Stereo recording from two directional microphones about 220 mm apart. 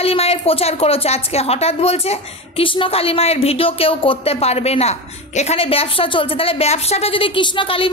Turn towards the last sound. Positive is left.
turn(degrees=25)  # may be behind; listen again after turning